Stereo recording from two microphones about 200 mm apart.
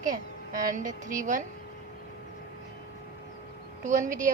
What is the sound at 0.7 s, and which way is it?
Speech, 40° right (ahead or behind).